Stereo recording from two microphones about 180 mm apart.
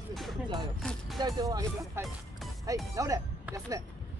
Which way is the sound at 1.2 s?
20° right (ahead or behind).